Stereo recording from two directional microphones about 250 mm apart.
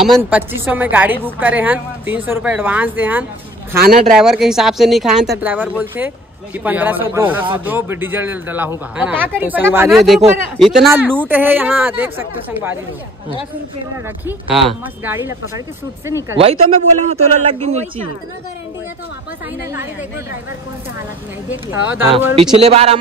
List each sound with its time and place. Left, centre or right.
0.0 s a woman's voice: centre
3.8 s speech: right
4.2 s a woman's voice: centre
16.3 s speech: right
21.5 s a woman's voice: centre
22.6 s speech: right